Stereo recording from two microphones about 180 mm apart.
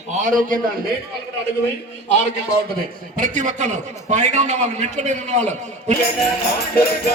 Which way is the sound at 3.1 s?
45° right (ahead or behind).